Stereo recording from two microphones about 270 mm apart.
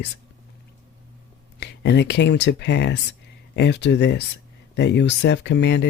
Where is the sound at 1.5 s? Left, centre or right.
Left.